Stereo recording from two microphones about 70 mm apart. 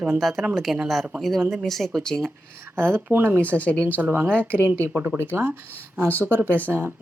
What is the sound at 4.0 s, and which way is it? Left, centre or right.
Speech, right.